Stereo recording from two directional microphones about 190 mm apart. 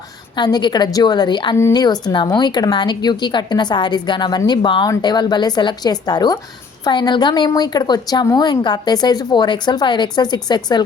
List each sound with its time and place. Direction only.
0.3 s speech: 25° left (ahead or behind)